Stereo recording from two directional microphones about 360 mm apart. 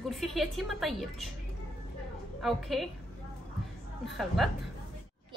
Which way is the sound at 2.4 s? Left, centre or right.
Centre.